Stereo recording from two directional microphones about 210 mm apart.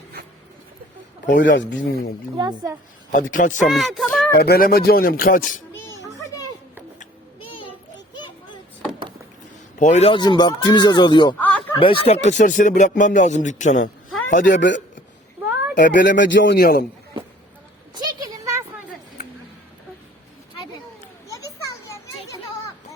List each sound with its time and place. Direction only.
1.4 s speech: 60° left (ahead or behind)
1.8 s speech: 50° left (ahead or behind)
2.4 s a woman's voice: 20° right (ahead or behind)
3.3 s speech: 40° left (ahead or behind)
3.7 s a sound: centre (ahead or behind)
4.4 s speech: 45° left (ahead or behind)
7.0 s a sound: 25° left (ahead or behind)
9.7 s a man's voice: 35° left (ahead or behind)
11.3 s snicker: 10° left (ahead or behind)
11.8 s speech: 25° left (ahead or behind)
14.5 s speech: 60° left (ahead or behind)
17.9 s a sound: 15° right (ahead or behind)
21.2 s children playing: 15° left (ahead or behind)